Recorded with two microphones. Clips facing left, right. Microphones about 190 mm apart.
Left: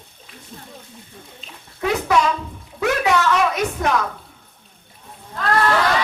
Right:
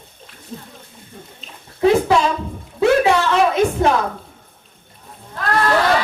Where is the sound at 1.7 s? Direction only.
25° right (ahead or behind).